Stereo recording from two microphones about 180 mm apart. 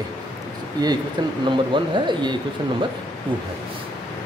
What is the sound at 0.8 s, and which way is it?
Speech, 25° right (ahead or behind).